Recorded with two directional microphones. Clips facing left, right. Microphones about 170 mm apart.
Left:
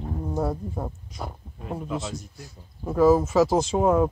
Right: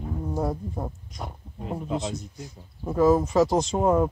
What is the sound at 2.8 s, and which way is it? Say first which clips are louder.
Speech: left 1 dB; centre (ahead or behind).